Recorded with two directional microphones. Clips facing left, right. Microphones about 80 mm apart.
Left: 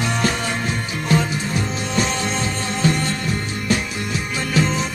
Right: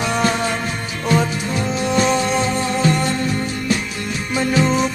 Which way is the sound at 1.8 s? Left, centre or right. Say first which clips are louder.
Right 7 dB; centre.